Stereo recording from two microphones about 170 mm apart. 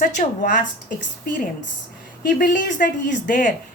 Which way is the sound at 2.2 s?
60° left (ahead or behind).